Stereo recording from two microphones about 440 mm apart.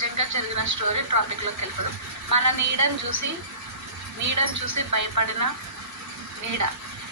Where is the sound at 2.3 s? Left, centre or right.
Right.